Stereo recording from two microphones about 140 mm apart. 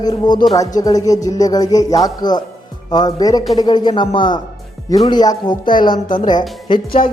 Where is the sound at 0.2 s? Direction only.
30° left (ahead or behind).